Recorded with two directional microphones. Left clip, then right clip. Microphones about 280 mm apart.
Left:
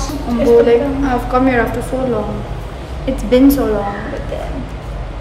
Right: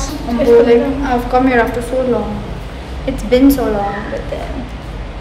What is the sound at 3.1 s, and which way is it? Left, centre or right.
Speech, centre.